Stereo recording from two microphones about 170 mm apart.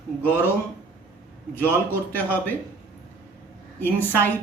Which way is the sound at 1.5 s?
10° left (ahead or behind).